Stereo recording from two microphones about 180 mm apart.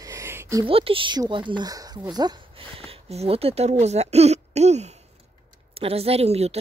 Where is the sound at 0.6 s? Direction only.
30° right (ahead or behind).